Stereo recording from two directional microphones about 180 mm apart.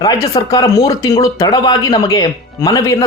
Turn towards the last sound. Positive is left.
turn(degrees=15)  # may be behind; listen again after turning